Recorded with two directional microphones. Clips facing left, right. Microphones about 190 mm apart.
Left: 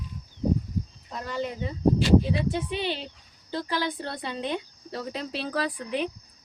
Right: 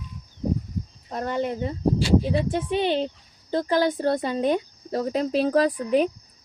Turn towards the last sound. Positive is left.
turn(degrees=-40)  # may be behind; listen again after turning